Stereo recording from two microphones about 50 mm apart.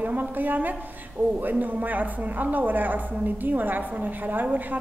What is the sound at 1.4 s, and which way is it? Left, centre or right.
Speech, right.